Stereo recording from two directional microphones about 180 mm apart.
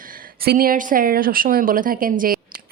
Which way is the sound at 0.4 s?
50° right (ahead or behind).